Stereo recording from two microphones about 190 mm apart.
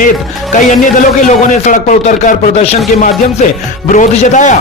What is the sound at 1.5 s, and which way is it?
Speech, 40° left (ahead or behind).